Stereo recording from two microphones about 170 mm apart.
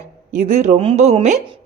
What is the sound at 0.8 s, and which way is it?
Speech, 35° right (ahead or behind).